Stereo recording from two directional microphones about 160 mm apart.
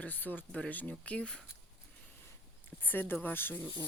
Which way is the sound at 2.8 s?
10° left (ahead or behind).